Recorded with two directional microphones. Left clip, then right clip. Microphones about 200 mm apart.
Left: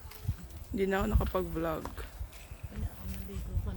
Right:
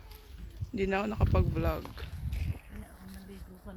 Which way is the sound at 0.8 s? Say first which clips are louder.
Even; 20° right (ahead or behind).